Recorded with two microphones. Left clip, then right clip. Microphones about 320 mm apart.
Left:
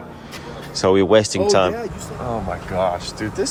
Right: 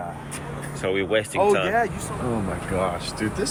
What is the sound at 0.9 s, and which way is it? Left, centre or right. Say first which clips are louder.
Speech: left 9 dB; left.